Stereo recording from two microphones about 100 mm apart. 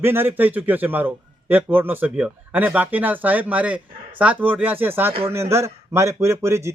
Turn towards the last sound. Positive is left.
turn(degrees=-30)  # may be behind; listen again after turning